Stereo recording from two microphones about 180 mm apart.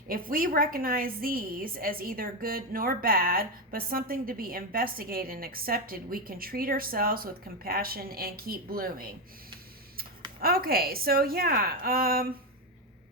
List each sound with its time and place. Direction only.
0.1 s a woman's voice: 50° right (ahead or behind)
10.4 s a woman's voice: 55° right (ahead or behind)